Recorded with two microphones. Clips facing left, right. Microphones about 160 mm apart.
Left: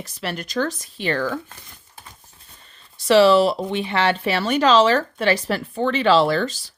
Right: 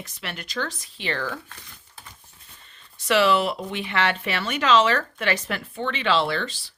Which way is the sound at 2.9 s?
35° left (ahead or behind).